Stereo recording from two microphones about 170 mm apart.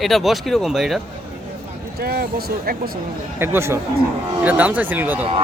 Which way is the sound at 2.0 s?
65° right (ahead or behind).